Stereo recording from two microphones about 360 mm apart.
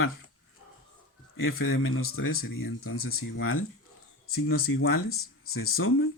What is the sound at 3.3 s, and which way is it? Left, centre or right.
Speech, left.